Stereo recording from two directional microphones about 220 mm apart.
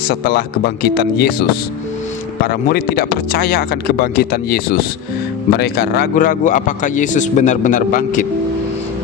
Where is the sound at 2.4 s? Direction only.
45° left (ahead or behind).